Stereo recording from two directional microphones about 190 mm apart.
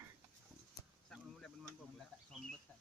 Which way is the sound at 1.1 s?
5° left (ahead or behind).